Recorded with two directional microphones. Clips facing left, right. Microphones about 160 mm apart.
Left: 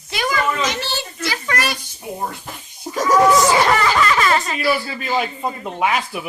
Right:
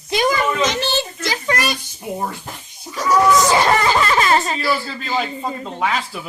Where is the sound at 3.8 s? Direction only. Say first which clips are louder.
Even; 30° right (ahead or behind).